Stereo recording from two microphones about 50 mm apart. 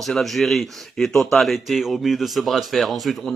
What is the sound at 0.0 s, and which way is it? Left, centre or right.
Speech, centre.